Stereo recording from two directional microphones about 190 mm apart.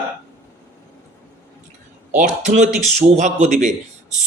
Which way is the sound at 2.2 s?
40° right (ahead or behind).